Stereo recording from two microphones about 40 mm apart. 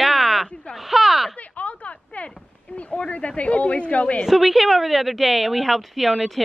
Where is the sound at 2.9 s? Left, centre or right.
Left.